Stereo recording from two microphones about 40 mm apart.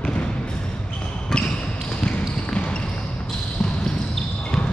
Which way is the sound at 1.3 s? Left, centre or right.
Centre.